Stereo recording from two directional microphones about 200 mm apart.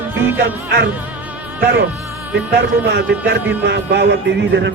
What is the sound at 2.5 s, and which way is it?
A man's voice, 55° right (ahead or behind).